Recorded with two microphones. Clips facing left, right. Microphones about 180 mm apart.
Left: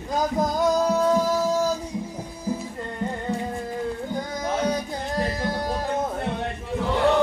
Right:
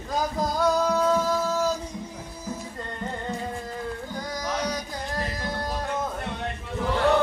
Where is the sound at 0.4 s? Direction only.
20° left (ahead or behind).